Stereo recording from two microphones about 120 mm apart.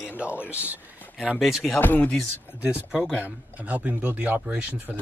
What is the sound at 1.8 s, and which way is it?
Speech, 15° left (ahead or behind).